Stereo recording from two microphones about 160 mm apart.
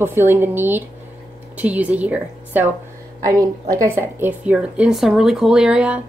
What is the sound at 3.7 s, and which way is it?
Speech, 15° right (ahead or behind).